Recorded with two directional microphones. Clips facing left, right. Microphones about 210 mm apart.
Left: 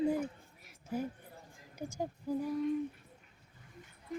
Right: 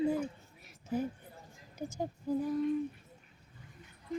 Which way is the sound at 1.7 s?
10° left (ahead or behind).